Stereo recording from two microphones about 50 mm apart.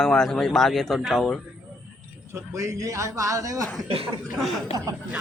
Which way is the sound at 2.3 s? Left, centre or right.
Right.